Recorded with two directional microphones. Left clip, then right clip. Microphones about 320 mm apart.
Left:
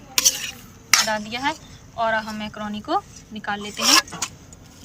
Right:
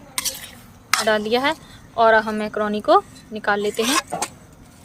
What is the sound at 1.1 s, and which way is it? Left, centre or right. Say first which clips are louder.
Speech: right 6 dB; right.